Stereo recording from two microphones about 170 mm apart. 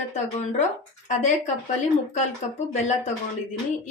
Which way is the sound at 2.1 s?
40° left (ahead or behind).